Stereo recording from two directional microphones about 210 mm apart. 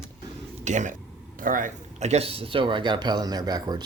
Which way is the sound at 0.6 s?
35° right (ahead or behind).